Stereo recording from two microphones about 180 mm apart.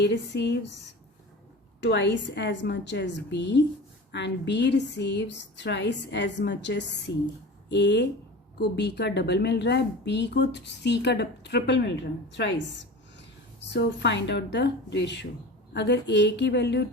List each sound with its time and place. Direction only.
0.0 s a woman's voice: 70° left (ahead or behind)
1.8 s a woman's voice: 75° left (ahead or behind)